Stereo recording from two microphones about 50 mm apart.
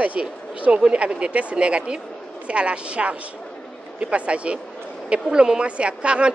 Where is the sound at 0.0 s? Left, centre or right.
Right.